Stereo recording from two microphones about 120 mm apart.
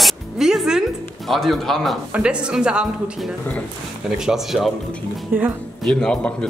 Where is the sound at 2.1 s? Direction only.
10° right (ahead or behind).